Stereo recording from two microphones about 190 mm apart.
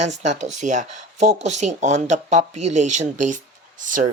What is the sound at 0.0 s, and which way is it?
Speech, 40° right (ahead or behind).